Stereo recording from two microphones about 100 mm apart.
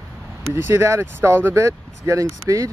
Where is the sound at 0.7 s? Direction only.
30° right (ahead or behind).